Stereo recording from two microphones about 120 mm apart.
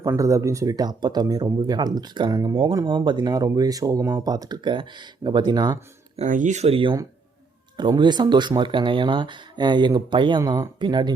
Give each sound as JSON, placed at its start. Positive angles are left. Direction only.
{"t": 0.0, "sound": "speech", "side_deg": -25}
{"t": 6.1, "sound": "speech", "side_deg": -90}
{"t": 7.8, "sound": "speech", "side_deg": -40}
{"t": 10.4, "sound": "speech", "side_deg": -30}